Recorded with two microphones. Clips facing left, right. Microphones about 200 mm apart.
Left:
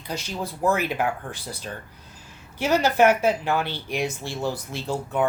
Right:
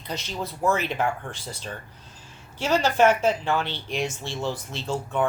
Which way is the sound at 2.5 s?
15° left (ahead or behind).